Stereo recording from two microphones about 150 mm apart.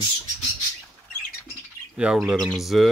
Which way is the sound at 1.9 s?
5° right (ahead or behind).